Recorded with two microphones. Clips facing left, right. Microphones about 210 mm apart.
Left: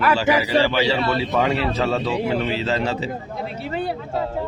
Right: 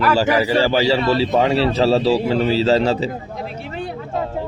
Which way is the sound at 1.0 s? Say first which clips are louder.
Right 4 dB; 30° right (ahead or behind).